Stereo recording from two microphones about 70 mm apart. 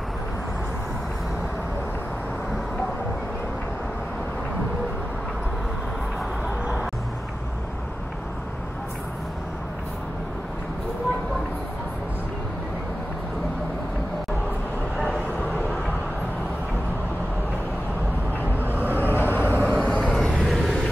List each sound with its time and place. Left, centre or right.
18.9 s vehicle: left
19.7 s vehicle: centre